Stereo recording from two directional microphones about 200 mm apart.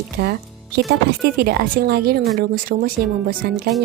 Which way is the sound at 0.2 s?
55° right (ahead or behind).